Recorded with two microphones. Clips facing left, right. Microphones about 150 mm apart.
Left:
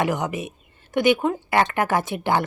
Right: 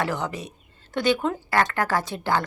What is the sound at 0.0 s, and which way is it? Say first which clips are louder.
A woman's voice: left 4 dB; 15° left (ahead or behind).